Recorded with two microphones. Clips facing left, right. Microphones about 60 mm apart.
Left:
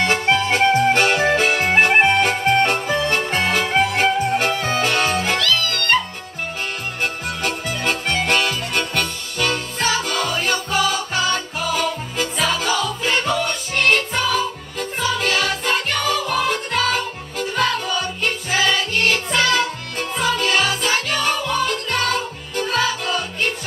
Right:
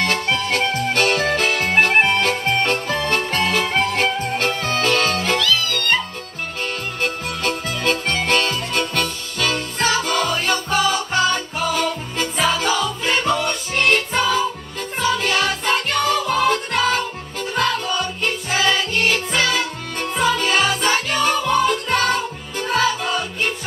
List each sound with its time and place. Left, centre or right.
0.0 s music: left
7.0 s music: centre